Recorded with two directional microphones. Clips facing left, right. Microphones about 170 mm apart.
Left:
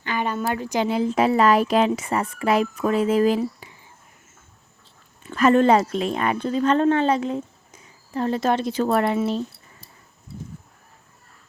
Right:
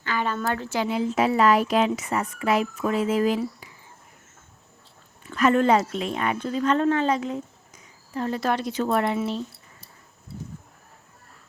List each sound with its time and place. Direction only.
0.0 s a sound: 20° left (ahead or behind)
0.9 s speech: 35° left (ahead or behind)
5.3 s speech: 30° left (ahead or behind)